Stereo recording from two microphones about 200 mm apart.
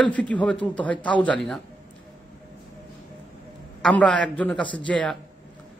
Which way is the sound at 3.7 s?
5° left (ahead or behind).